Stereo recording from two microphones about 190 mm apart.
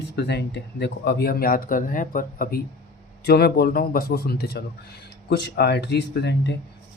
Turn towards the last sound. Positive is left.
turn(degrees=65)  # may be behind; listen again after turning